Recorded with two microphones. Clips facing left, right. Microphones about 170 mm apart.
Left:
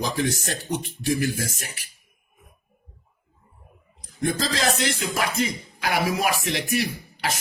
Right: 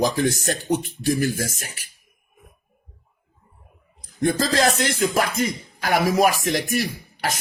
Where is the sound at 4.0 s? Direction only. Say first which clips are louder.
Right 4 dB; 55° right (ahead or behind).